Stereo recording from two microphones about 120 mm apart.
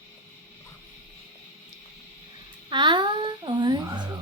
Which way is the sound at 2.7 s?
40° right (ahead or behind).